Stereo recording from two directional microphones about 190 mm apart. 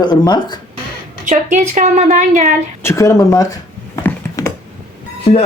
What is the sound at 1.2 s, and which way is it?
A woman's voice, 40° right (ahead or behind).